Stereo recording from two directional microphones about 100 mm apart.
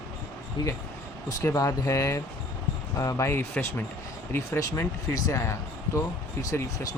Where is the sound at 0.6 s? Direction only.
50° left (ahead or behind).